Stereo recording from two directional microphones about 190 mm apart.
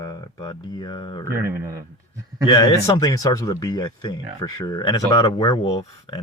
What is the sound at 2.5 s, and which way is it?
Speech, 25° left (ahead or behind).